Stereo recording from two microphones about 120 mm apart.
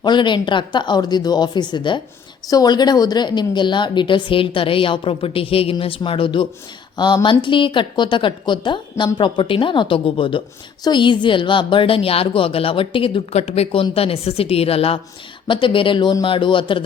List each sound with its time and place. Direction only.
0.0 s a woman's voice: 40° left (ahead or behind)
15.4 s a woman's voice: 45° left (ahead or behind)